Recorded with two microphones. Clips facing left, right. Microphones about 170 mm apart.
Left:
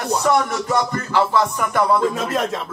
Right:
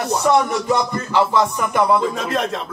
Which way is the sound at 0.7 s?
15° right (ahead or behind).